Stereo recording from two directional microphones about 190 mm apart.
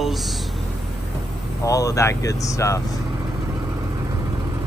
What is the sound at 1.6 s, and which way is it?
Speech, 15° left (ahead or behind).